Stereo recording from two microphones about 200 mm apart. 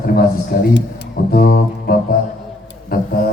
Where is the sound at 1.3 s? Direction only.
50° left (ahead or behind).